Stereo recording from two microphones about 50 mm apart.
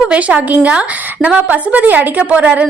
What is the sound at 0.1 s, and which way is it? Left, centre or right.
A woman's voice, right.